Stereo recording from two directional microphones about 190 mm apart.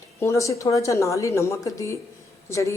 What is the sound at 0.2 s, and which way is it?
Speech, 15° left (ahead or behind).